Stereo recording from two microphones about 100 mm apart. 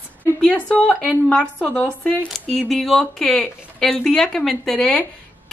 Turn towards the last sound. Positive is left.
turn(degrees=5)  # may be behind; listen again after turning